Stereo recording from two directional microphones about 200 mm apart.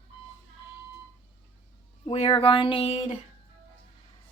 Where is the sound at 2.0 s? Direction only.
30° left (ahead or behind).